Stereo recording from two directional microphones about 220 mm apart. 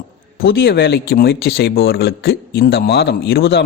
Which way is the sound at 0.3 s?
45° left (ahead or behind).